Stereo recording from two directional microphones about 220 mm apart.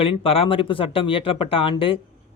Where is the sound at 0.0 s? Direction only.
25° left (ahead or behind).